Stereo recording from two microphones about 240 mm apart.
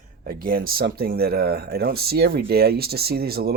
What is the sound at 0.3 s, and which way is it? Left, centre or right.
Speech, right.